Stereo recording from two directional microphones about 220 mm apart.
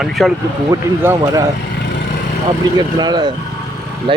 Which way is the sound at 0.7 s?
15° right (ahead or behind).